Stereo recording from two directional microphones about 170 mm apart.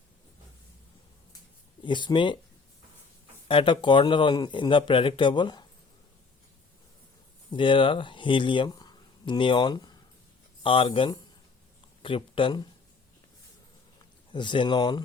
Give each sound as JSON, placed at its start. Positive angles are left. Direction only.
{"t": 1.8, "sound": "speech", "side_deg": 25}
{"t": 3.5, "sound": "speech", "side_deg": 30}
{"t": 7.5, "sound": "speech", "side_deg": 30}
{"t": 14.3, "sound": "speech", "side_deg": 30}